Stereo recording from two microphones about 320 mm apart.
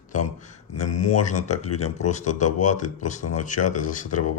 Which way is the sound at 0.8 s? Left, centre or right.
Left.